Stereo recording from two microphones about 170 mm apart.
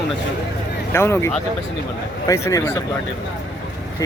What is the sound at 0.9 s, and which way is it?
A man's voice, 15° left (ahead or behind).